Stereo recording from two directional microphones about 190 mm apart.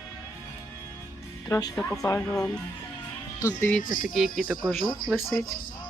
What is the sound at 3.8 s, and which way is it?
Speech, 45° left (ahead or behind).